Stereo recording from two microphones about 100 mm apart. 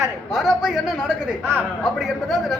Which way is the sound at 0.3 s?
5° right (ahead or behind).